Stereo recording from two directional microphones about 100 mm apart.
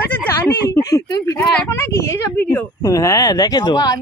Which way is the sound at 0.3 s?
30° left (ahead or behind).